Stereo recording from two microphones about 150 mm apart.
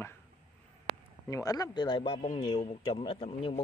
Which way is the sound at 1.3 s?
25° left (ahead or behind).